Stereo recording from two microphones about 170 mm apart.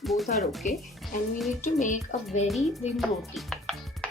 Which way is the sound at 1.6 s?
45° left (ahead or behind).